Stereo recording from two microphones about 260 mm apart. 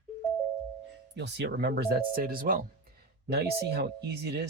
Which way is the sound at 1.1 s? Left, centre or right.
Right.